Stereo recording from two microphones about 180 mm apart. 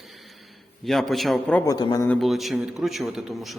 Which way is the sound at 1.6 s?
20° left (ahead or behind).